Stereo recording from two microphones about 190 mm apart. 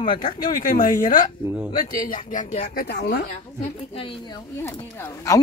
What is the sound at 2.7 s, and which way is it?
Speech, 55° left (ahead or behind).